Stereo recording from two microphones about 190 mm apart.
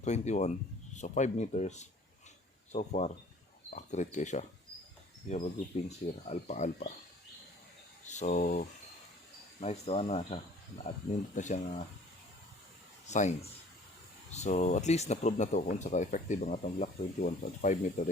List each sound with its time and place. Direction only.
0.0 s speech: 35° left (ahead or behind)
8.0 s a sound: 40° left (ahead or behind)
9.6 s speech: 35° left (ahead or behind)
13.1 s speech: 40° left (ahead or behind)